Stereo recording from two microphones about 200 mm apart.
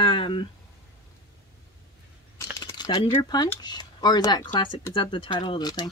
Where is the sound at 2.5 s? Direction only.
20° left (ahead or behind).